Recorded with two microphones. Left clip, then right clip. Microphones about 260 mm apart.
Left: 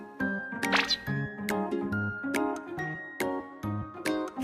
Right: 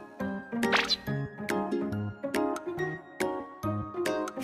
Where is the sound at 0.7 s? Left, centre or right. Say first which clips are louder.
Even; centre.